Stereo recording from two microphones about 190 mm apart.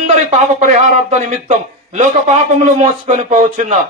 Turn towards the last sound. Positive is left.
turn(degrees=-40)  # may be behind; listen again after turning